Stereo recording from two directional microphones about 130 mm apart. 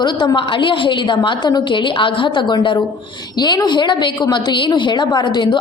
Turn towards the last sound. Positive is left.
turn(degrees=35)  # may be behind; listen again after turning